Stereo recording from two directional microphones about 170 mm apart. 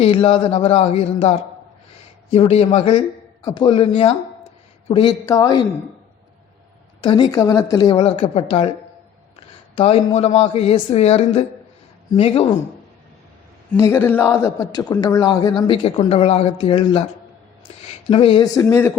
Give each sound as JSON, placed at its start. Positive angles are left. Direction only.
{"t": 0.0, "sound": "speech", "side_deg": 30}
{"t": 5.2, "sound": "a man's voice", "side_deg": 20}
{"t": 7.0, "sound": "a man's voice", "side_deg": 25}
{"t": 9.3, "sound": "a sound", "side_deg": 35}
{"t": 10.2, "sound": "speech", "side_deg": 35}
{"t": 13.7, "sound": "a man's voice", "side_deg": 15}
{"t": 18.1, "sound": "a man's voice", "side_deg": 30}